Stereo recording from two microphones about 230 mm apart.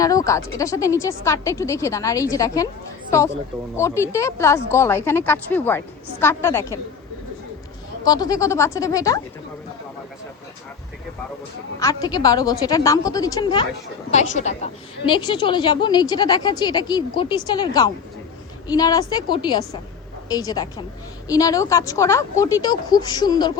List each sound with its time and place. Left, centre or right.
0.0 s a woman's voice: centre
8.0 s a woman's voice: centre
11.8 s a woman's voice: centre
14.1 s a woman's voice: left